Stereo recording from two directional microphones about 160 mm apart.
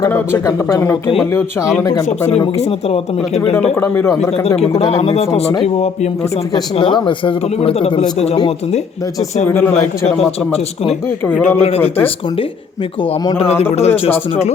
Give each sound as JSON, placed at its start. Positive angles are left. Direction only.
{"t": 0.0, "sound": "speech", "side_deg": 20}
{"t": 2.6, "sound": "speech", "side_deg": 40}
{"t": 3.8, "sound": "speech", "side_deg": 15}
{"t": 4.4, "sound": "speech", "side_deg": 40}
{"t": 9.5, "sound": "speech", "side_deg": 15}
{"t": 11.4, "sound": "speech", "side_deg": 40}
{"t": 11.8, "sound": "speech", "side_deg": 10}
{"t": 13.7, "sound": "speech", "side_deg": 40}